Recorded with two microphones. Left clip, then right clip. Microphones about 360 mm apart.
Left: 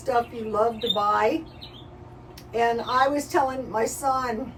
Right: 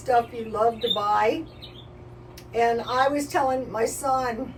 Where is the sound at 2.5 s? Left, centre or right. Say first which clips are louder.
Even; centre.